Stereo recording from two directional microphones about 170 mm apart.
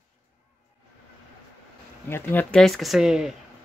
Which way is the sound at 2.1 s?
10° left (ahead or behind).